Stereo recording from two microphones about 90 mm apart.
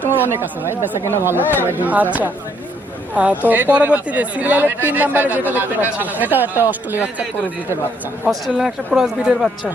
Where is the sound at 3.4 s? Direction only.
20° right (ahead or behind).